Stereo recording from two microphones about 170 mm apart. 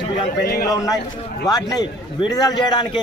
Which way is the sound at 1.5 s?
20° left (ahead or behind).